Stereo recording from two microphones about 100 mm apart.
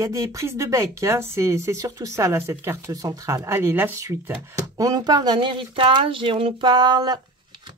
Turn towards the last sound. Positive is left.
turn(degrees=-45)  # may be behind; listen again after turning